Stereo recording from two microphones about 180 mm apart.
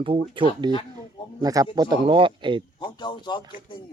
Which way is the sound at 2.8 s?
25° left (ahead or behind).